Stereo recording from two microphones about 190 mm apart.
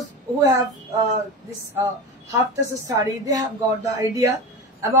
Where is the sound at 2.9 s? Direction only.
20° right (ahead or behind).